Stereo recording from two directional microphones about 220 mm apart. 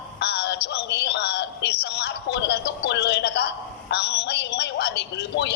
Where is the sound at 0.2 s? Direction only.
50° left (ahead or behind).